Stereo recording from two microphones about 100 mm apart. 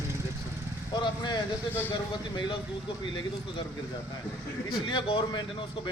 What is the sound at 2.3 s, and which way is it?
Speech, 50° left (ahead or behind).